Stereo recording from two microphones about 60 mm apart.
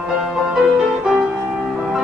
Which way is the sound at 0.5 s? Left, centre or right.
Centre.